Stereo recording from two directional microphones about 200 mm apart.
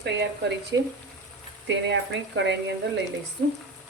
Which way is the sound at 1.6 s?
65° right (ahead or behind).